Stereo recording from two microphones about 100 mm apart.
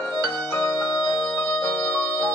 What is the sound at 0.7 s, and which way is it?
Music, 30° left (ahead or behind).